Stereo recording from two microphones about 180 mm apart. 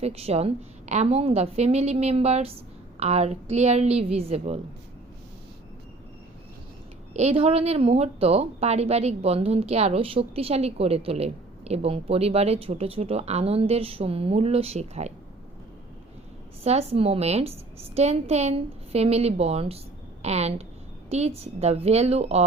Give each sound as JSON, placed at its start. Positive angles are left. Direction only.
{"t": 0.0, "sound": "speech", "side_deg": -35}
{"t": 7.1, "sound": "speech", "side_deg": -35}
{"t": 16.6, "sound": "speech", "side_deg": -35}